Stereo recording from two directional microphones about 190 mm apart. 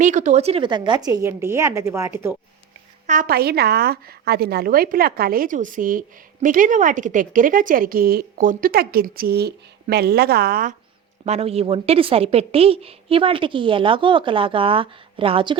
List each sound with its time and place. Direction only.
0.0 s a woman's voice: 40° right (ahead or behind); by 2.4 s 10° right (ahead or behind)
3.1 s a woman's voice: 45° right (ahead or behind)
11.3 s a woman's voice: 30° right (ahead or behind)